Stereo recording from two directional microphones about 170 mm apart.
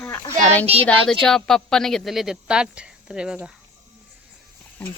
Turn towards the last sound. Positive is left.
turn(degrees=5)  # may be behind; listen again after turning